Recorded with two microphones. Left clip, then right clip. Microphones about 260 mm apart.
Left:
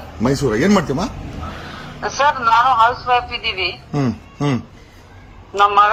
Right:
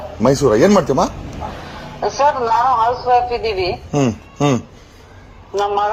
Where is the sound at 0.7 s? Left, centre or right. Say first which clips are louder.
Right 4 dB; centre.